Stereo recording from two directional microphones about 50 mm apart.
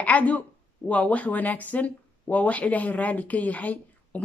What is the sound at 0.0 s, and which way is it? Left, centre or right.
Speech, left.